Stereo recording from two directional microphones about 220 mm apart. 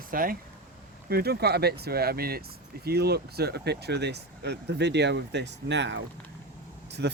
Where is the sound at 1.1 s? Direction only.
45° right (ahead or behind).